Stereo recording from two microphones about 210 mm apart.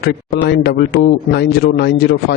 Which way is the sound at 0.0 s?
50° left (ahead or behind).